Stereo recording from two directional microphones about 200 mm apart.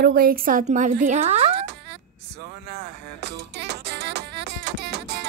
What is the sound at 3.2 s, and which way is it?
Music, 55° right (ahead or behind).